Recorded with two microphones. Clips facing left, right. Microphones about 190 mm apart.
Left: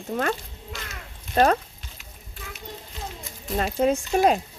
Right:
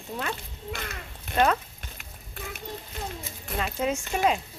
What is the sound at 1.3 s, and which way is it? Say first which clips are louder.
Speech: left 4 dB; 40° left (ahead or behind).